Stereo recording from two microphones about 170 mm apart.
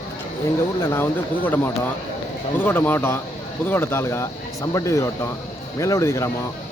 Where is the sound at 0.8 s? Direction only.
15° left (ahead or behind).